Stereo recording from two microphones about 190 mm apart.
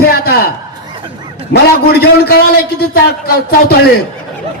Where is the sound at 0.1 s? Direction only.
55° left (ahead or behind).